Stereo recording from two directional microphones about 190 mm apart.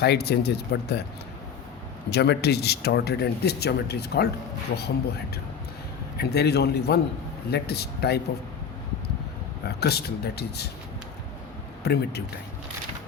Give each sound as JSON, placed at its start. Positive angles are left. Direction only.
{"t": 0.0, "sound": "speech", "side_deg": 60}
{"t": 2.0, "sound": "speech", "side_deg": 60}
{"t": 6.1, "sound": "speech", "side_deg": 60}
{"t": 9.6, "sound": "speech", "side_deg": 55}
{"t": 11.8, "sound": "speech", "side_deg": 60}